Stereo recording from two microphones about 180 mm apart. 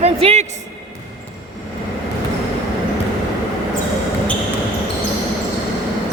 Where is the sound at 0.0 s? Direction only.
35° right (ahead or behind).